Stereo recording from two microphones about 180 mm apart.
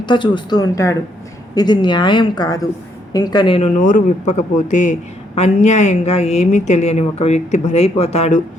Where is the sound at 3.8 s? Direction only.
45° left (ahead or behind).